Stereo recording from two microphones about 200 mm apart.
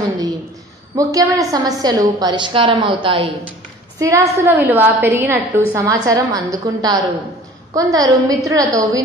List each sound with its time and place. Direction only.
0.9 s a woman's voice: 15° right (ahead or behind)
4.0 s a woman's voice: 15° right (ahead or behind)